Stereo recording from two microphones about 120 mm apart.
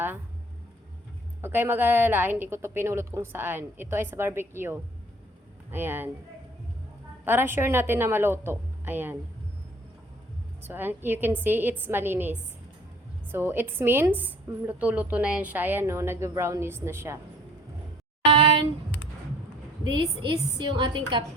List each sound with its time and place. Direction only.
1.4 s a woman's voice: 20° right (ahead or behind)
7.3 s a woman's voice: 20° right (ahead or behind)
10.7 s a woman's voice: 15° right (ahead or behind)
13.3 s a woman's voice: 20° right (ahead or behind)
19.9 s a woman's voice: 35° right (ahead or behind)